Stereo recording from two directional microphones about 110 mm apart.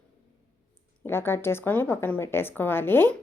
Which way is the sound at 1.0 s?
20° left (ahead or behind).